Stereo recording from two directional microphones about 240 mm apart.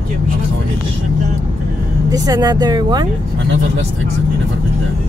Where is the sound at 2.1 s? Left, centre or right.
Centre.